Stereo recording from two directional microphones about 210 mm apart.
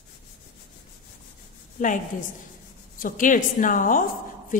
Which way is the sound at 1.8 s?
40° left (ahead or behind).